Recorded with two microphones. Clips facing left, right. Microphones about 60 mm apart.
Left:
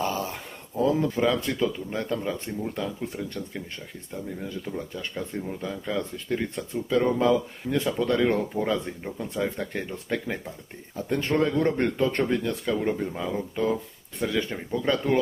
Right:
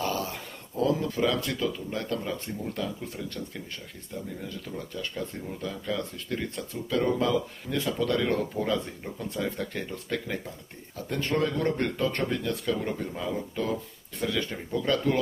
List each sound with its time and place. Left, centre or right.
0.8 s speech: left
4.7 s speech: left